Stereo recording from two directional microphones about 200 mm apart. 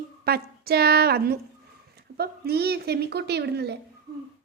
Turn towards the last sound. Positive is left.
turn(degrees=-55)  # may be behind; listen again after turning